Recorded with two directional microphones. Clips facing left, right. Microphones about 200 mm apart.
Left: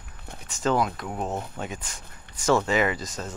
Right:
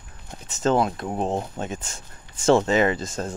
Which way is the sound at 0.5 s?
25° right (ahead or behind).